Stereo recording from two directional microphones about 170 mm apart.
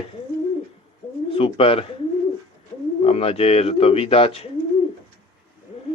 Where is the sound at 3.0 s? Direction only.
35° left (ahead or behind).